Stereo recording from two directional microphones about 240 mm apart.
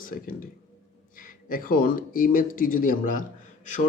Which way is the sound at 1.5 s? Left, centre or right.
Left.